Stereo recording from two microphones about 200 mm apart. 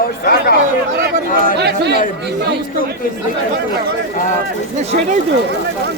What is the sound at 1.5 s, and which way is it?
Speech, 55° right (ahead or behind).